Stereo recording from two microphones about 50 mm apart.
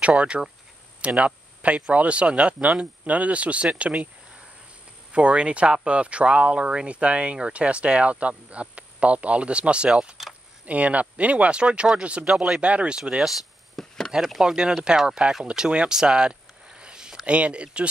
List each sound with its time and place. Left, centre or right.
0.0 s speech: right
1.0 s a sound: right
1.9 s speech: right
5.1 s speech: right
10.6 s speech: right
13.7 s a sound: centre
14.4 s speech: centre
15.4 s a sound: centre
17.3 s speech: right